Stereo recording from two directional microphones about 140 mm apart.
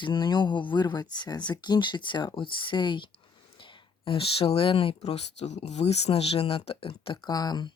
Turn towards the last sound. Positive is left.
turn(degrees=30)  # may be behind; listen again after turning